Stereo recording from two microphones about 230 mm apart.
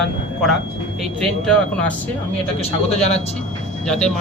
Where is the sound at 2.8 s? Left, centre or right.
Left.